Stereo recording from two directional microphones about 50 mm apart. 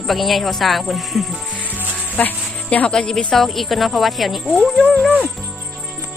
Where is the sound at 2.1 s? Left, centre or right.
Left.